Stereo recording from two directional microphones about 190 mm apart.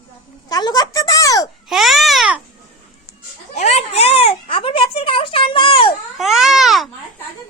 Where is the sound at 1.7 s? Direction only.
Centre (ahead or behind).